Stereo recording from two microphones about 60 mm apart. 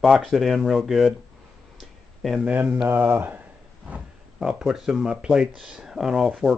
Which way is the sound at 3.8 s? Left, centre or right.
Centre.